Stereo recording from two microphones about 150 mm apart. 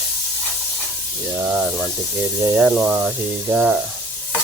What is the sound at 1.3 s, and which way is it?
Speech, 10° right (ahead or behind).